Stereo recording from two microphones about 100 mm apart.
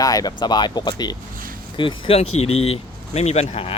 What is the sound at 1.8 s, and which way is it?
Speech, 65° left (ahead or behind).